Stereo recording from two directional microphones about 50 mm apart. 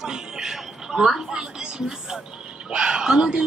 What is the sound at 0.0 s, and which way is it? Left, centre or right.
Music, centre.